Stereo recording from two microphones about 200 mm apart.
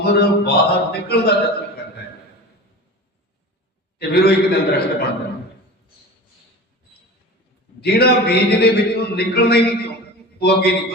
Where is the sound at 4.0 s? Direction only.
50° left (ahead or behind).